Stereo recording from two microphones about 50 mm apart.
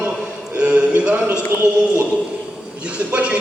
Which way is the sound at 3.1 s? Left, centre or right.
Right.